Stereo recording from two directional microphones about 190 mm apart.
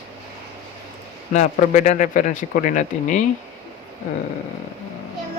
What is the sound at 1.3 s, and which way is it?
Speech, 40° left (ahead or behind).